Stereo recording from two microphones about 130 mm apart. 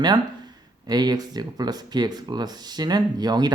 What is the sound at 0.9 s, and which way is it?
Speech, 30° right (ahead or behind).